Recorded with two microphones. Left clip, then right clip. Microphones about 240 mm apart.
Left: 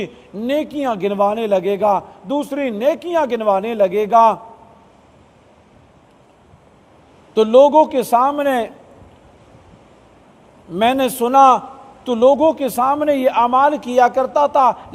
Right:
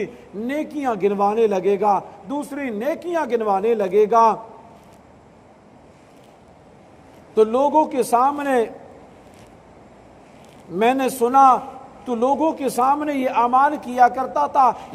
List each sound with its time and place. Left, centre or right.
0.0 s a man's voice: left
7.3 s a man's voice: left
10.7 s a man's voice: left